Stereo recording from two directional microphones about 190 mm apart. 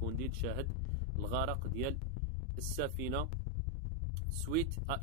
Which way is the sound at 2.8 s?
50° right (ahead or behind).